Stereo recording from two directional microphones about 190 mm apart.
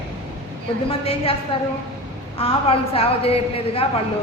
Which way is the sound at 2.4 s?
30° left (ahead or behind).